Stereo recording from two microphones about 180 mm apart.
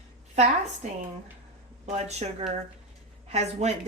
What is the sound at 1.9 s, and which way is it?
Speech, 40° right (ahead or behind).